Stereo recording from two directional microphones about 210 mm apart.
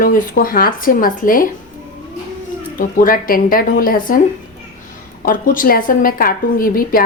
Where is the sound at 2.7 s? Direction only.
40° left (ahead or behind).